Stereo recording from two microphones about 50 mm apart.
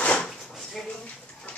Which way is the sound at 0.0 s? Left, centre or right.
Left.